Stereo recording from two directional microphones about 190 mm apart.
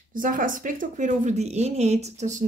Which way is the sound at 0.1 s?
45° right (ahead or behind).